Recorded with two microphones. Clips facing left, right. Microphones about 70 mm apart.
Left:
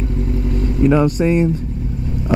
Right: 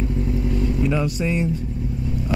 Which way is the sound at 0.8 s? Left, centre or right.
Left.